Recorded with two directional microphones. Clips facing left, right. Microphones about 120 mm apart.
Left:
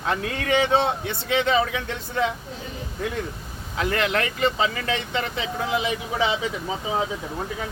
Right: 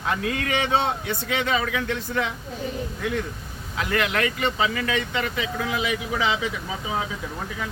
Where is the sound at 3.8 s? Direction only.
30° left (ahead or behind).